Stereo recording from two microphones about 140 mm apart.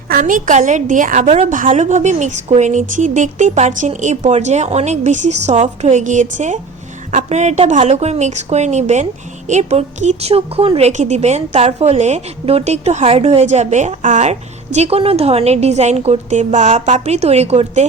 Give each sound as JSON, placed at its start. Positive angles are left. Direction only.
{"t": 0.1, "sound": "a woman's voice", "side_deg": -75}